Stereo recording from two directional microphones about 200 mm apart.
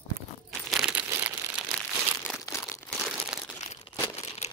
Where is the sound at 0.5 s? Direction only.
Centre (ahead or behind).